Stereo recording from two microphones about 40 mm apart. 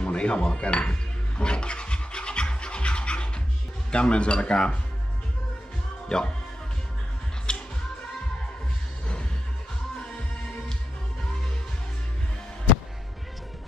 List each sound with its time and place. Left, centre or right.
0.0 s cutlery: left
1.4 s music: left
3.9 s speech: left
6.0 s speech: centre
7.5 s music: left